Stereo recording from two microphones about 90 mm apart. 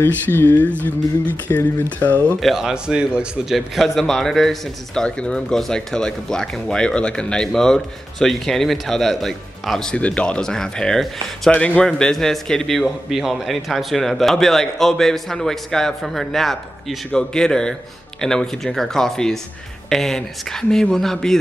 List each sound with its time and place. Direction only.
0.0 s speech: 25° left (ahead or behind)
2.4 s a man's voice: 5° right (ahead or behind)
3.5 s speech: centre (ahead or behind)